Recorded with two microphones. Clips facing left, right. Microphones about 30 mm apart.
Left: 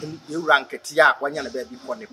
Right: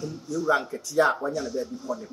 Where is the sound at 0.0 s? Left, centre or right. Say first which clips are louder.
Left 1 dB; left.